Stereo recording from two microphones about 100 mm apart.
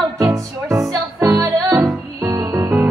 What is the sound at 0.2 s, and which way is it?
Music, 35° right (ahead or behind).